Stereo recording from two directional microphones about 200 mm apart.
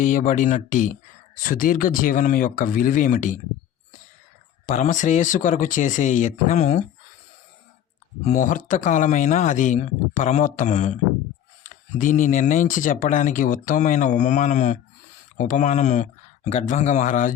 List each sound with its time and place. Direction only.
0.0 s speech: 40° left (ahead or behind)
4.6 s speech: 40° left (ahead or behind)
8.2 s speech: 35° left (ahead or behind)